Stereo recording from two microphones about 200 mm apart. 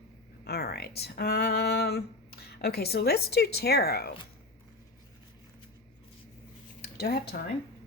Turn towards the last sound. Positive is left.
turn(degrees=50)  # may be behind; listen again after turning